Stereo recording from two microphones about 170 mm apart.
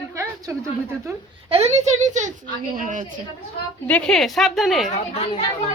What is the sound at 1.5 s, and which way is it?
A woman's voice, 40° right (ahead or behind).